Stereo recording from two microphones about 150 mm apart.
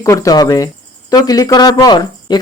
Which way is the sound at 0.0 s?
20° left (ahead or behind).